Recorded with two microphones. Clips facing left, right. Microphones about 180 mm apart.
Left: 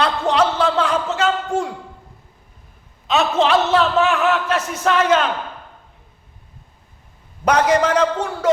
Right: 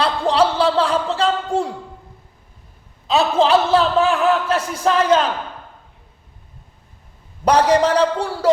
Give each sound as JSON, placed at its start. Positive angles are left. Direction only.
{"t": 0.0, "sound": "a sound", "side_deg": -30}
{"t": 3.1, "sound": "a man's voice", "side_deg": -30}
{"t": 7.4, "sound": "a man's voice", "side_deg": -35}